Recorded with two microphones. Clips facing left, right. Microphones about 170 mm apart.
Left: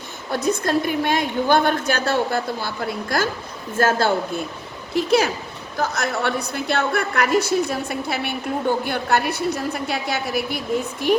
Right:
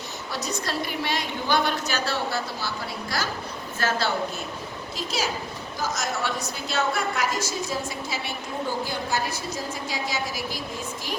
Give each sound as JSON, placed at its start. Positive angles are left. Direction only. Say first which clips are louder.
{"t": 0.3, "sound": "a woman's voice", "louder": "left 10 dB", "side_deg": 55}